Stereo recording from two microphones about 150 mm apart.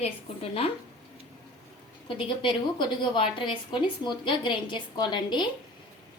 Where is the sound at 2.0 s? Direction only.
35° left (ahead or behind).